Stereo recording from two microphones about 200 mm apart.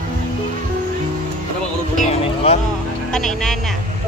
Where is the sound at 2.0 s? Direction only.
30° left (ahead or behind).